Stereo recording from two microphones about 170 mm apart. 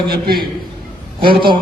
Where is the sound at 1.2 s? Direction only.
30° right (ahead or behind).